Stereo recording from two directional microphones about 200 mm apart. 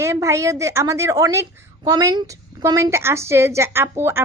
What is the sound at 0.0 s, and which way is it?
A woman's voice, 15° right (ahead or behind).